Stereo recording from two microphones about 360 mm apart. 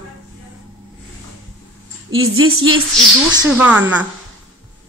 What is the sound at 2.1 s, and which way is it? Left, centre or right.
Speech, right.